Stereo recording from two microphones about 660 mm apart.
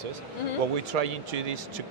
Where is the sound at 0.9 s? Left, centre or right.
Right.